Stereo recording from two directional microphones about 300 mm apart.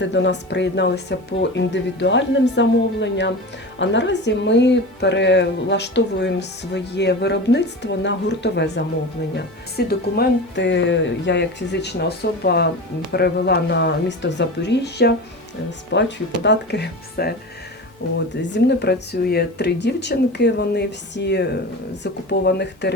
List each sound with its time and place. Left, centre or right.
0.0 s speech: left
18.5 s speech: left